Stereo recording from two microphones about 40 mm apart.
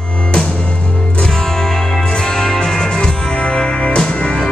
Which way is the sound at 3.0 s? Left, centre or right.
Left.